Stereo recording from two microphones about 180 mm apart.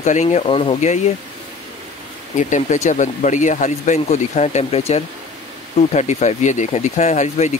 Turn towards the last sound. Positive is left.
turn(degrees=40)  # may be behind; listen again after turning